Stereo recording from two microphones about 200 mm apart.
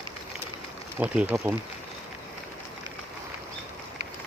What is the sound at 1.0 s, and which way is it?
Speech, 5° right (ahead or behind).